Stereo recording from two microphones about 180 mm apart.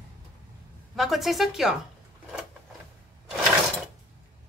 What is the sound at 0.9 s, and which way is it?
Speech, centre (ahead or behind).